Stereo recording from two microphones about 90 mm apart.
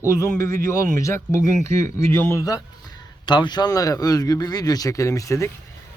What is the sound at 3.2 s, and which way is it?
Speech, 55° left (ahead or behind).